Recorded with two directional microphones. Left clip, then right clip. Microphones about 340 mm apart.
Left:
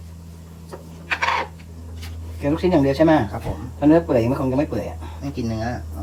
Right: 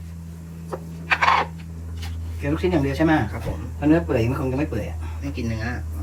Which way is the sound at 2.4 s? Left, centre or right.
Centre.